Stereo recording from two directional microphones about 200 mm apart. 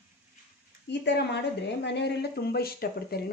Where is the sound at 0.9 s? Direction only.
60° left (ahead or behind).